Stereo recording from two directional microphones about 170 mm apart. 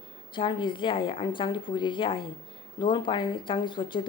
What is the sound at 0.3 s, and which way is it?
Speech, 30° left (ahead or behind).